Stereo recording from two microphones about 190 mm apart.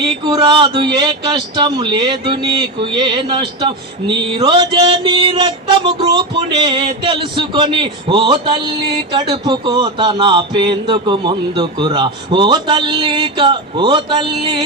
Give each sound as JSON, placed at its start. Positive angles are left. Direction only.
{"t": 0.3, "sound": "speech", "side_deg": -20}